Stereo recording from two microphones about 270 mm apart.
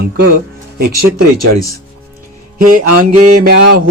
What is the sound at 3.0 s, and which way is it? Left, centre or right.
Speech, right.